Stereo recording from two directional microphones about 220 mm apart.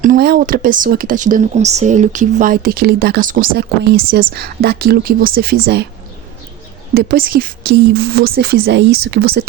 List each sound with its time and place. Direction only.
0.0 s speech: 40° right (ahead or behind)
6.9 s speech: 40° right (ahead or behind)